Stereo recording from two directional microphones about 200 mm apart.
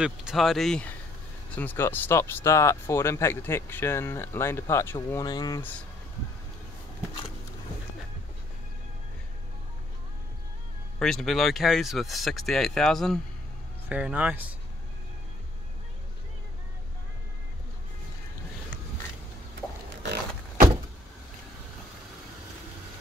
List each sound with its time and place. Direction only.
0.0 s speech: 5° right (ahead or behind); by 5.7 s 20° left (ahead or behind)
11.0 s speech: centre (ahead or behind)
20.0 s vehicle: 55° right (ahead or behind)